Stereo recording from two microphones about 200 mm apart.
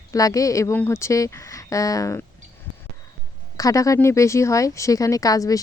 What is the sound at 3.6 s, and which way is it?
Speech, 15° left (ahead or behind).